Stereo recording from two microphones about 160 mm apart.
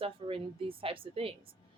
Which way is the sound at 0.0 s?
35° right (ahead or behind).